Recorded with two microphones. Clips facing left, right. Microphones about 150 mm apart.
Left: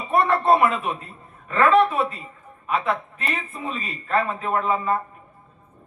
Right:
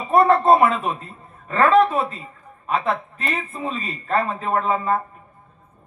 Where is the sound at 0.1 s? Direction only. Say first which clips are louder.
Right 4 dB; 35° right (ahead or behind).